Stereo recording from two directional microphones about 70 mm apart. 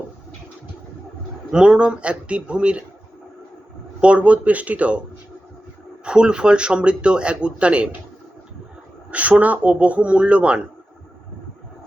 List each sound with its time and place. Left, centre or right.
1.5 s speech: centre
4.0 s speech: centre
6.1 s speech: centre
9.0 s speech: centre